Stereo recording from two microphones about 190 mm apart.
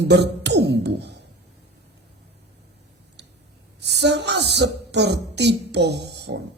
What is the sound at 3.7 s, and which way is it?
Speech, 60° right (ahead or behind).